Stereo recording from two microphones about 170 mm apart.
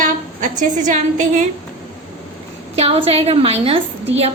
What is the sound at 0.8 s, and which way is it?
Speech, 45° right (ahead or behind).